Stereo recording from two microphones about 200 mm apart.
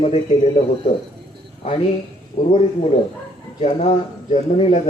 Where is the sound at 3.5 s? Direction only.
30° left (ahead or behind).